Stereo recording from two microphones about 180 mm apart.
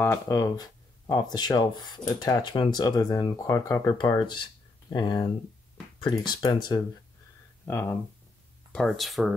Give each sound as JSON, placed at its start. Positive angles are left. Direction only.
{"t": 0.0, "sound": "speech", "side_deg": 15}
{"t": 8.7, "sound": "speech", "side_deg": 0}